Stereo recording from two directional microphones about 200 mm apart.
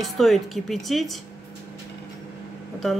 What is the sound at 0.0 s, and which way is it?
A man's voice, centre (ahead or behind).